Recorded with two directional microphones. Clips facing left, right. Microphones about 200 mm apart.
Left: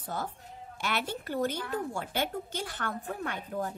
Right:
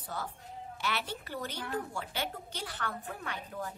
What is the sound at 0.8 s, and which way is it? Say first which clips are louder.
A woman's voice: left 4 dB; 50° left (ahead or behind).